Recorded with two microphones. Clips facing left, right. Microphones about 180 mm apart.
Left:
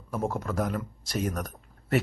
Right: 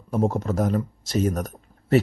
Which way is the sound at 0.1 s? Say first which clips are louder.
Right 7 dB; 20° right (ahead or behind).